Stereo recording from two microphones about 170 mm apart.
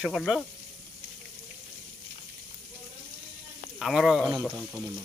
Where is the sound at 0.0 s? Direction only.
Centre (ahead or behind).